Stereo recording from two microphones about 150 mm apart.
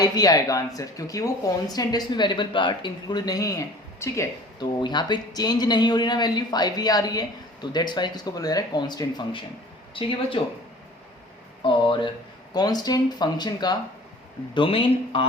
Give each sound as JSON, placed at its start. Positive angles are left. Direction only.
{"t": 0.0, "sound": "speech", "side_deg": 25}
{"t": 4.8, "sound": "speech", "side_deg": 30}
{"t": 11.6, "sound": "speech", "side_deg": 35}
{"t": 12.5, "sound": "speech", "side_deg": 25}